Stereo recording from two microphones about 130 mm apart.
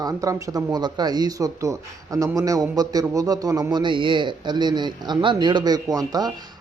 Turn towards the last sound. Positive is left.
turn(degrees=-30)  # may be behind; listen again after turning